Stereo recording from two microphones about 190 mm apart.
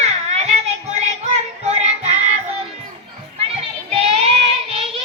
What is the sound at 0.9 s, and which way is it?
Music, 35° right (ahead or behind).